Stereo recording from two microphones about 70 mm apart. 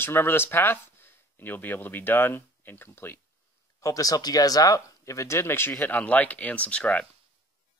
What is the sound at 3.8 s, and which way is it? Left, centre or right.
Speech, left.